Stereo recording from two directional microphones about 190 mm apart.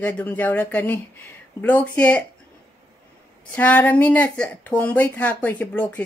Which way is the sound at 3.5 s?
10° left (ahead or behind).